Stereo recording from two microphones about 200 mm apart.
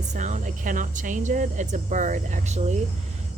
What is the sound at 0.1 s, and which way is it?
Speech, 35° right (ahead or behind).